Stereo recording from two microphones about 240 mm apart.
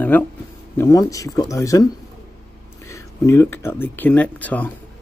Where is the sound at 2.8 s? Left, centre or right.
Centre.